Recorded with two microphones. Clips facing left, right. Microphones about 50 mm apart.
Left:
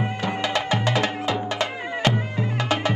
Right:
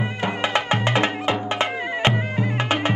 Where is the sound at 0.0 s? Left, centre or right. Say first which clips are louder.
Right 1 dB; right.